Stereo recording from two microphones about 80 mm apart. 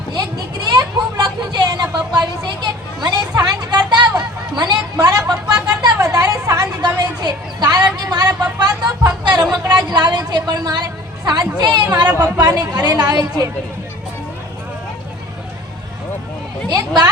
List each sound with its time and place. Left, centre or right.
0.1 s vehicle: right
4.2 s chatter: right
5.5 s a sound: right
8.5 s vehicle: right
9.7 s a sound: right
11.3 s chatter: right
12.5 s a woman's voice: right
16.6 s a woman's voice: right